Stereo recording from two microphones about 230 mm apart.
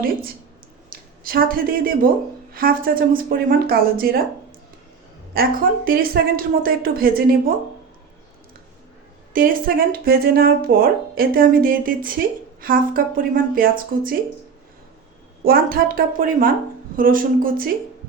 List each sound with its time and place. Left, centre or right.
0.9 s speech: right
5.3 s speech: right
9.3 s speech: right
15.4 s speech: right